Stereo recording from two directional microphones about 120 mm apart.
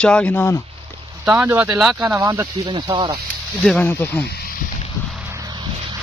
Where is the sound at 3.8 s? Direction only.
15° left (ahead or behind).